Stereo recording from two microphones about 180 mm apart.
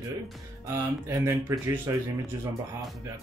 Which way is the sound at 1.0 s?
15° right (ahead or behind).